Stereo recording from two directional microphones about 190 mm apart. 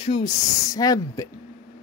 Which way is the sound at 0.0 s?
25° left (ahead or behind).